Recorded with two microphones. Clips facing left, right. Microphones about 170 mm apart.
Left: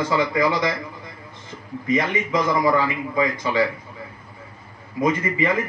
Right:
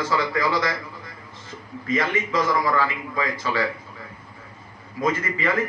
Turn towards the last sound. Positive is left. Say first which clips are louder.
# left 3 dB
turn(degrees=15)  # may be behind; listen again after turning